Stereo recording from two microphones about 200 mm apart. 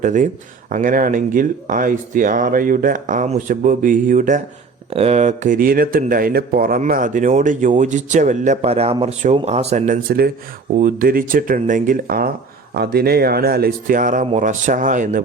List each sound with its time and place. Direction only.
0.0 s speech: 40° right (ahead or behind)